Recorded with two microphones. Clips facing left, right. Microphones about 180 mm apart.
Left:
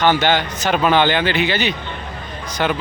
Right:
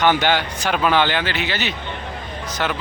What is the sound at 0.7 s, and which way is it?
Speech, centre (ahead or behind).